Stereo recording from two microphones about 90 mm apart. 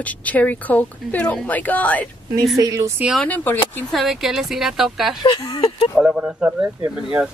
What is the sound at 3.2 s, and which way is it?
Speech, 20° left (ahead or behind).